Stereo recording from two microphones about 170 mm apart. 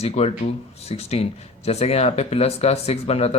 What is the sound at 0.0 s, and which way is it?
Speech, 40° left (ahead or behind).